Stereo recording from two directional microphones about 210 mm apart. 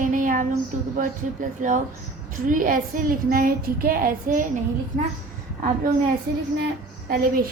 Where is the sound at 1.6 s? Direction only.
40° right (ahead or behind).